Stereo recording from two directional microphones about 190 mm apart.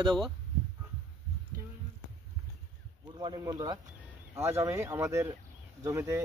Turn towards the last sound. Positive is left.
turn(degrees=-15)  # may be behind; listen again after turning